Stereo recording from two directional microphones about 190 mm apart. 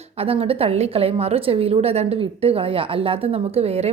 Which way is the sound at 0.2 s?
30° right (ahead or behind).